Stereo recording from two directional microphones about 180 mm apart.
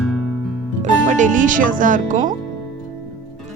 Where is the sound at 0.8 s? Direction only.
45° right (ahead or behind).